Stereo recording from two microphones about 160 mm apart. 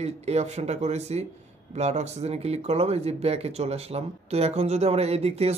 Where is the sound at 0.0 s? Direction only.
40° right (ahead or behind).